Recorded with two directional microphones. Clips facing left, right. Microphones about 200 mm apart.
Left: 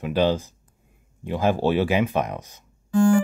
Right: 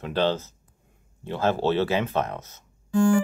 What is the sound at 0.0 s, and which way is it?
Speech, 10° left (ahead or behind).